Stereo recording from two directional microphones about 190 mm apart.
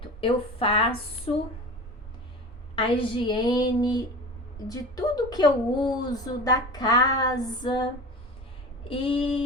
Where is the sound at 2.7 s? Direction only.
25° left (ahead or behind).